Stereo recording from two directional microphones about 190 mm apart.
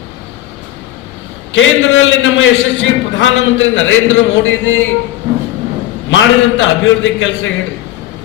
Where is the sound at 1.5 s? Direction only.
90° left.